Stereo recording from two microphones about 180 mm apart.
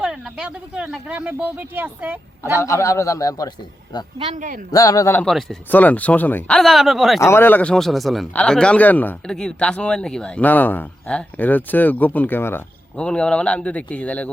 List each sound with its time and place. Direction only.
0.0 s speech: 5° right (ahead or behind)
2.4 s speech: 15° left (ahead or behind)
4.2 s a man's voice: 40° right (ahead or behind)
4.7 s speech: 20° left (ahead or behind)
5.2 s speech: centre (ahead or behind)
7.2 s speech: 15° left (ahead or behind)